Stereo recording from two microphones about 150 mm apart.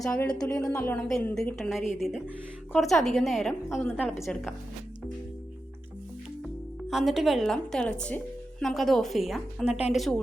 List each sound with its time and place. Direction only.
0.0 s speech: 20° left (ahead or behind)
1.0 s speech: centre (ahead or behind)
3.7 s speech: 15° left (ahead or behind)
6.9 s speech: centre (ahead or behind)